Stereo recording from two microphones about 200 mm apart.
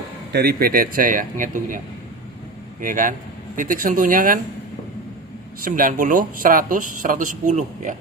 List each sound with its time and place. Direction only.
0.3 s speech: 50° right (ahead or behind)
2.8 s speech: 40° right (ahead or behind)
5.6 s speech: 45° right (ahead or behind)